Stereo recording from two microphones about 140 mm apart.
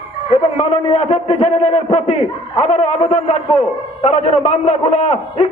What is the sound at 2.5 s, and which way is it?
A man's voice, 45° left (ahead or behind).